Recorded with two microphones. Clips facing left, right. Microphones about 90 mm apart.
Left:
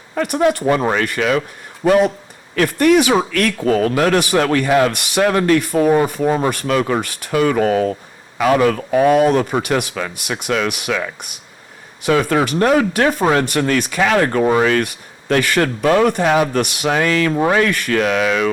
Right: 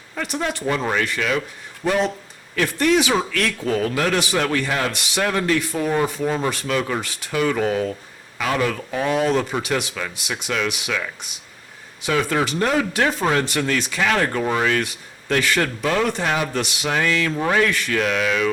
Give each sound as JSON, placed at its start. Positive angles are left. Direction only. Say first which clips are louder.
{"t": 0.2, "sound": "speech", "louder": "left 9 dB", "side_deg": 55}